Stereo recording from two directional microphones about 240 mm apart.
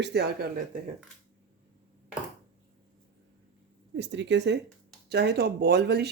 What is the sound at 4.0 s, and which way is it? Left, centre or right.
Speech, right.